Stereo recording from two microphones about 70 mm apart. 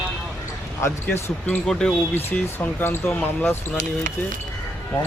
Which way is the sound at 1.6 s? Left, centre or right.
Centre.